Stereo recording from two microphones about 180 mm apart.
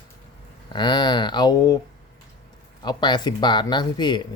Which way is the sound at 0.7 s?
25° left (ahead or behind).